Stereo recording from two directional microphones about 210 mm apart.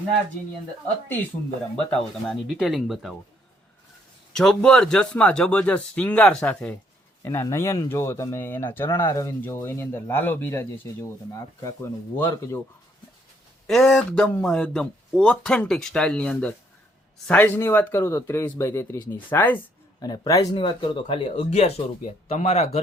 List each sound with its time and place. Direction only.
1.0 s speech: 10° left (ahead or behind)
4.3 s speech: 5° left (ahead or behind)
13.7 s speech: centre (ahead or behind)
19.3 s a sound: 10° left (ahead or behind)
20.1 s speech: 15° left (ahead or behind); by 22.8 s 30° left (ahead or behind)